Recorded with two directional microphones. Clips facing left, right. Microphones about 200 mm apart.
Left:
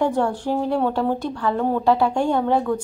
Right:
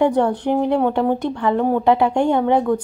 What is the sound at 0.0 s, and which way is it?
Speech, 20° right (ahead or behind).